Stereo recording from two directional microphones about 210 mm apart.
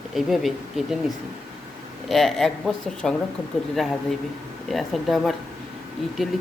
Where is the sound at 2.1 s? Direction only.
Centre (ahead or behind).